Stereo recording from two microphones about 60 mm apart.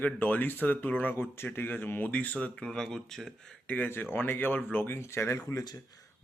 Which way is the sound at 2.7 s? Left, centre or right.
Centre.